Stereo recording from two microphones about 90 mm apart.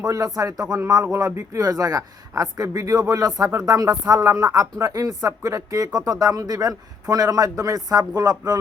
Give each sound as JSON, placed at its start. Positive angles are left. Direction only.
{"t": 0.0, "sound": "speech", "side_deg": -40}